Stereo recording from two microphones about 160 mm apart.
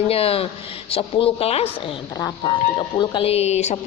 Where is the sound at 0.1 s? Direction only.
35° left (ahead or behind).